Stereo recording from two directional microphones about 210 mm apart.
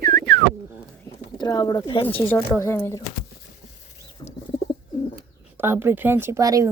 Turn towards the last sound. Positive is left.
turn(degrees=-15)  # may be behind; listen again after turning